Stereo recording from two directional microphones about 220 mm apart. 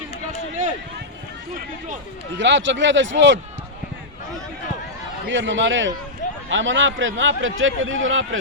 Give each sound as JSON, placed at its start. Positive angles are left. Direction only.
{"t": 2.4, "sound": "a man's voice", "side_deg": -55}
{"t": 5.3, "sound": "a man's voice", "side_deg": -60}